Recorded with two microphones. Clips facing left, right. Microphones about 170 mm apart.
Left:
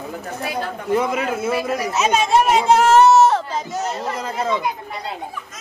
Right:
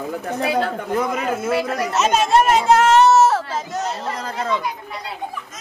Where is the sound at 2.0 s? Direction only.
Centre (ahead or behind).